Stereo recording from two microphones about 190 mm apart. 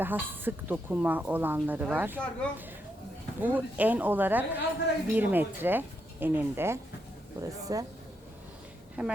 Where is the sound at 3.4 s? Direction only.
10° right (ahead or behind).